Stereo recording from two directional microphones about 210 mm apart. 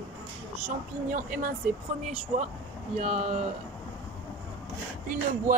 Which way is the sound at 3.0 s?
35° right (ahead or behind).